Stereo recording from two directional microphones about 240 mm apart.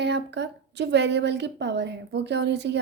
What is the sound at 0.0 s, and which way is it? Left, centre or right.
A woman's voice, right.